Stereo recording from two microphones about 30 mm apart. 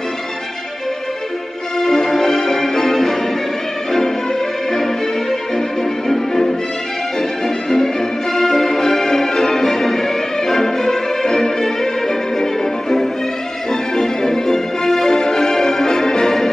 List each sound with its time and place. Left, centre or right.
1.8 s music: centre
4.7 s music: centre
13.7 s music: centre